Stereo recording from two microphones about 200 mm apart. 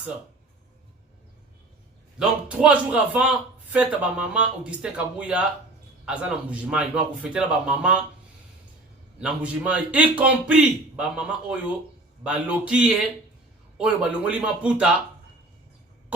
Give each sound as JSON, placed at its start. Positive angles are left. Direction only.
{"t": 2.1, "sound": "a man's voice", "side_deg": -5}
{"t": 9.2, "sound": "a man's voice", "side_deg": -5}